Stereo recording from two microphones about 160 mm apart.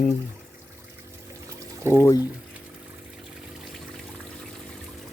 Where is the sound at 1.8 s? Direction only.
15° right (ahead or behind).